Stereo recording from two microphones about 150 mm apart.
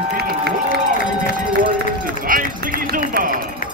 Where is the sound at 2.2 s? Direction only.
70° right (ahead or behind).